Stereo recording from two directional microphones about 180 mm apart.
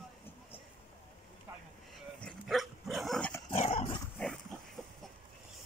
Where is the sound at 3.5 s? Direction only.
35° left (ahead or behind).